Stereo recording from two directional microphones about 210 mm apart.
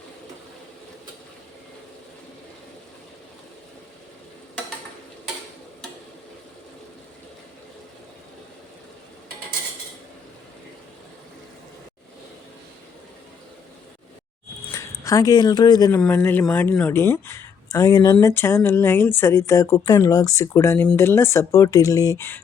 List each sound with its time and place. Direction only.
14.7 s speech: 15° left (ahead or behind)